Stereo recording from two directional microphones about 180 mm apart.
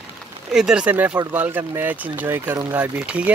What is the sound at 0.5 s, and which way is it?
Speech, 5° right (ahead or behind).